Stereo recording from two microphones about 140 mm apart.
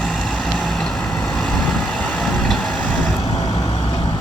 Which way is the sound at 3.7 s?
40° left (ahead or behind).